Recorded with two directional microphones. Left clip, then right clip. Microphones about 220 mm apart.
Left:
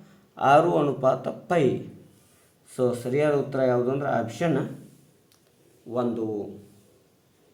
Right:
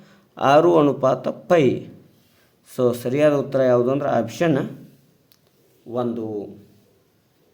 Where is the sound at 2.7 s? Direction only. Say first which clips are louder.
Right 4 dB; 45° right (ahead or behind).